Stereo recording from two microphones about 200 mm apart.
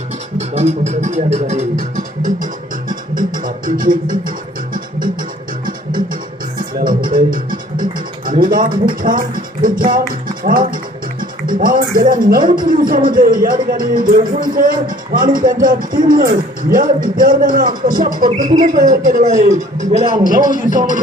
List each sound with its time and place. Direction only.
0.3 s speech: 30° right (ahead or behind)
2.9 s music: 40° right (ahead or behind)
6.6 s music: 45° right (ahead or behind)
11.2 s speech: 45° right (ahead or behind)